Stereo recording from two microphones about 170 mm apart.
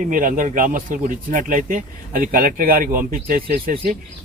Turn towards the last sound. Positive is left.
turn(degrees=-55)  # may be behind; listen again after turning